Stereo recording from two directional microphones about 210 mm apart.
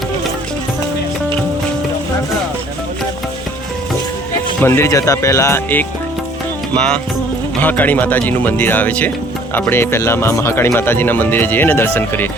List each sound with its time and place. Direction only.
4.6 s speech: 10° left (ahead or behind)
7.6 s speech: 10° left (ahead or behind)